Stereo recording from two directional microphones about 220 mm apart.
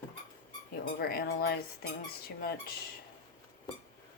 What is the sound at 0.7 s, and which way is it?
Speech, 45° left (ahead or behind).